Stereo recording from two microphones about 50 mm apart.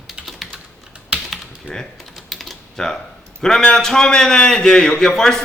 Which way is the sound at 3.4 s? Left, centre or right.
Centre.